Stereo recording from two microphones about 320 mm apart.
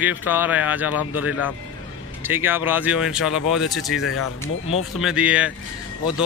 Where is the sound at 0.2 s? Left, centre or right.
Centre.